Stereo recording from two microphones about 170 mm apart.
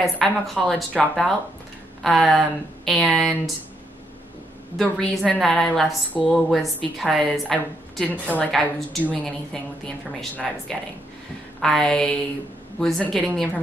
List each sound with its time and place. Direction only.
0.0 s a woman's voice: centre (ahead or behind)
4.7 s a woman's voice: centre (ahead or behind)